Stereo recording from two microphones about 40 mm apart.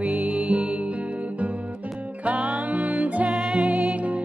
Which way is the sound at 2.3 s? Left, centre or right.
Right.